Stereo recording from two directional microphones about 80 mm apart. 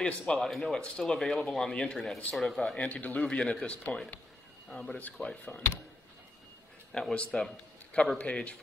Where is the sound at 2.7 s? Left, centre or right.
Centre.